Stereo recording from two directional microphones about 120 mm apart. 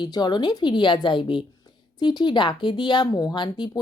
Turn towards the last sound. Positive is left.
turn(degrees=40)  # may be behind; listen again after turning